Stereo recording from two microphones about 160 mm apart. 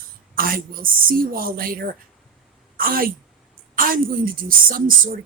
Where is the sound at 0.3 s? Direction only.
65° right (ahead or behind).